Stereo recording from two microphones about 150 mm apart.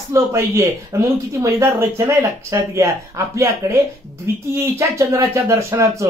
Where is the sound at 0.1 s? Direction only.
20° right (ahead or behind).